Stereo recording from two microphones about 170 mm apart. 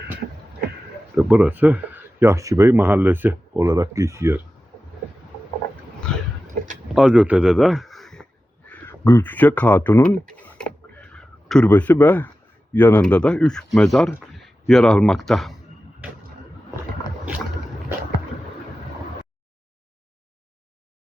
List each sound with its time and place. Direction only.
1.1 s speech: 5° right (ahead or behind)
6.9 s a sound: 5° right (ahead or behind)
12.7 s speech: 10° left (ahead or behind)